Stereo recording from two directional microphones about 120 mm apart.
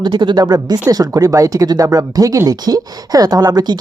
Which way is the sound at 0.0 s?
40° right (ahead or behind).